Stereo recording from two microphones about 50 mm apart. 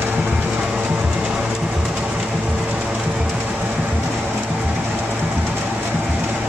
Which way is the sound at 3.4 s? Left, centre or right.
Right.